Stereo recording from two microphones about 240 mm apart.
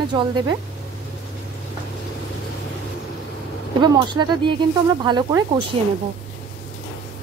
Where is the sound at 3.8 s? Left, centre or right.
Centre.